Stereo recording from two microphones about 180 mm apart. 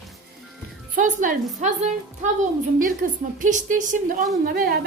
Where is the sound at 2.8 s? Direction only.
50° right (ahead or behind).